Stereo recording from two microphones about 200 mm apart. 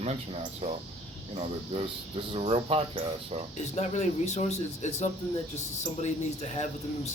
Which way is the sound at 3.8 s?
35° left (ahead or behind).